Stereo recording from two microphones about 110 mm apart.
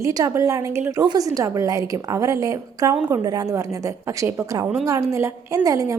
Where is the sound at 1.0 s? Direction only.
35° right (ahead or behind).